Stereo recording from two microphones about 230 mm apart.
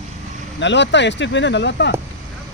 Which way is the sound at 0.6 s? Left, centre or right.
Left.